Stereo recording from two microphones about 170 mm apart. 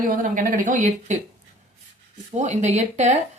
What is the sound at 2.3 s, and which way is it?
Speech, 45° right (ahead or behind).